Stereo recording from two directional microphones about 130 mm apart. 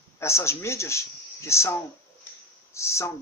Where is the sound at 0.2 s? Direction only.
20° left (ahead or behind).